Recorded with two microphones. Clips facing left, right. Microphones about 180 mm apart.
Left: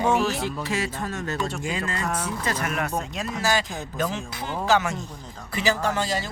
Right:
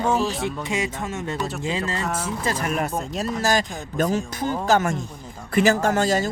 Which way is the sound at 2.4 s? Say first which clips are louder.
Right 4 dB; 35° right (ahead or behind).